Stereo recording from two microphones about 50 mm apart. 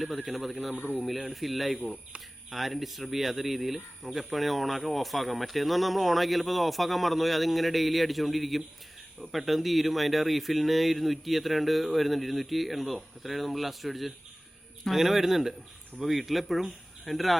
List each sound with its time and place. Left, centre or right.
0.2 s speech: centre
0.8 s speech: left
1.0 s speech: centre